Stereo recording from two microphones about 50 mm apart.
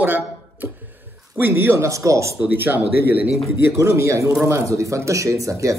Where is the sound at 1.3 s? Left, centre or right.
Right.